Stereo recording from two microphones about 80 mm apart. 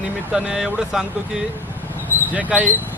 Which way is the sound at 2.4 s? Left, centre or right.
Centre.